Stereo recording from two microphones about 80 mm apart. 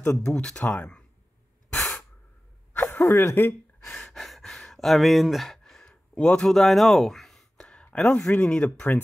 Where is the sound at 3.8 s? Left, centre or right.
Centre.